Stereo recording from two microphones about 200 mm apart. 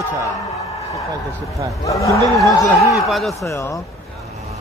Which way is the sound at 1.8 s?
15° left (ahead or behind).